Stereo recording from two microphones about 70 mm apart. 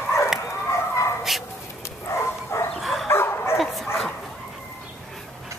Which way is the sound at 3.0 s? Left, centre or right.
Left.